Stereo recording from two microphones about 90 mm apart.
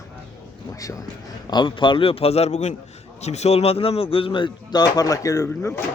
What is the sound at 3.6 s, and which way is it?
A man's voice, 90° left.